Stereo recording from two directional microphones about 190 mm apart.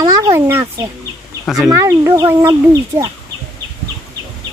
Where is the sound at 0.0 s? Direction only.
15° right (ahead or behind).